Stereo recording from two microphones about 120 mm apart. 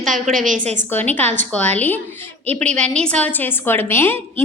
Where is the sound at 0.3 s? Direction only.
90° right.